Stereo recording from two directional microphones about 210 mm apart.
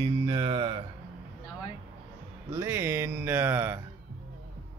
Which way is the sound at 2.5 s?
15° right (ahead or behind).